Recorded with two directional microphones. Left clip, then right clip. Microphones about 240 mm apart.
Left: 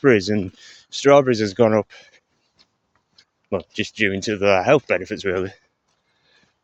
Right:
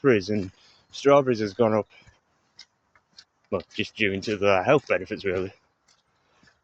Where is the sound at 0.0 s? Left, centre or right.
Left.